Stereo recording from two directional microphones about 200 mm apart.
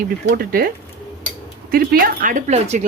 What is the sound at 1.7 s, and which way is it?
Speech, 45° right (ahead or behind).